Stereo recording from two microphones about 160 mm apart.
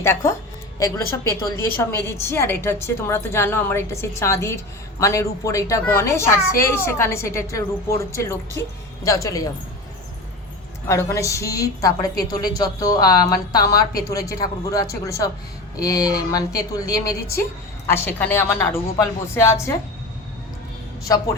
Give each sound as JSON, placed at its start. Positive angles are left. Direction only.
{"t": 0.0, "sound": "a woman's voice", "side_deg": 15}
{"t": 10.8, "sound": "a woman's voice", "side_deg": 20}
{"t": 21.0, "sound": "a woman's voice", "side_deg": 20}